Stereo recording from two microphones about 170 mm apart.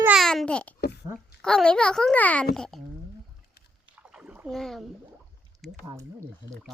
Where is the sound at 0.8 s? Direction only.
80° left.